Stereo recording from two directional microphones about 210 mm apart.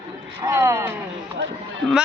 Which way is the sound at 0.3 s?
15° right (ahead or behind).